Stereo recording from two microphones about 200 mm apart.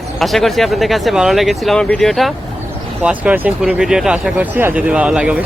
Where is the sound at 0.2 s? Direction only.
Centre (ahead or behind).